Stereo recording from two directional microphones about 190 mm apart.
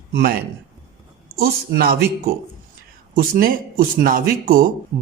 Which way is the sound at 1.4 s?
50° right (ahead or behind).